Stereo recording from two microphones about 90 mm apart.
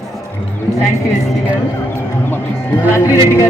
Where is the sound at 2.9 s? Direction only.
35° left (ahead or behind).